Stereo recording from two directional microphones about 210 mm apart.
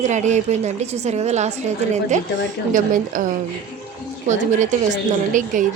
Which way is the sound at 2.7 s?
40° right (ahead or behind).